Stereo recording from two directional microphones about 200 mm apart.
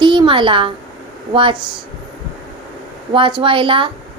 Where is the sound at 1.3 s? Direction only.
25° right (ahead or behind).